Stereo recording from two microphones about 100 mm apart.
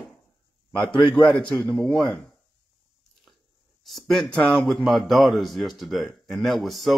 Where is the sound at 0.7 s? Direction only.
55° left (ahead or behind).